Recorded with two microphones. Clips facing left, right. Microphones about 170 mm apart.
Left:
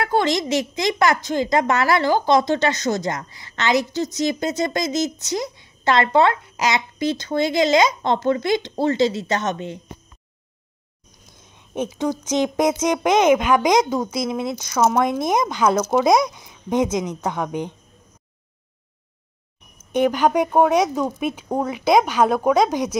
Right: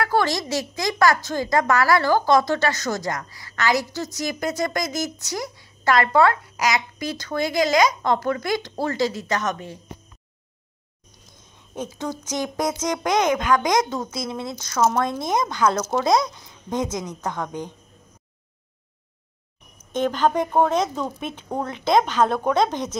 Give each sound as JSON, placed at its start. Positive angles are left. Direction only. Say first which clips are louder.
{"t": 0.0, "sound": "a woman's voice", "louder": "left 2 dB", "side_deg": 20}
{"t": 11.5, "sound": "a woman's voice", "louder": "left 6 dB", "side_deg": 20}
{"t": 19.9, "sound": "speech", "louder": "left 3 dB", "side_deg": 15}